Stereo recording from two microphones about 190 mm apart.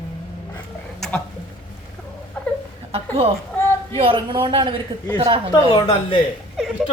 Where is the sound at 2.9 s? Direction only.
30° right (ahead or behind).